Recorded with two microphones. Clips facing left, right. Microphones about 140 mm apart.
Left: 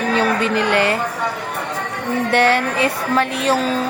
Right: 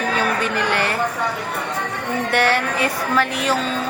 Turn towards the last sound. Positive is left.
turn(degrees=25)  # may be behind; listen again after turning